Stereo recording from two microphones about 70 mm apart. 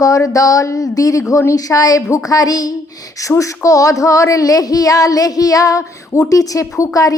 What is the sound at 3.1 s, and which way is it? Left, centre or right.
A woman's voice, left.